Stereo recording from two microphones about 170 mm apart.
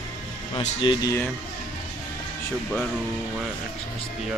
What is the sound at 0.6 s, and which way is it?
Speech, 35° left (ahead or behind).